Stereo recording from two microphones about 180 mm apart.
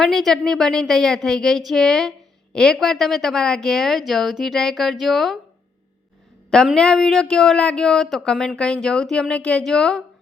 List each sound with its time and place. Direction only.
0.0 s speech: centre (ahead or behind)
6.5 s speech: 5° left (ahead or behind)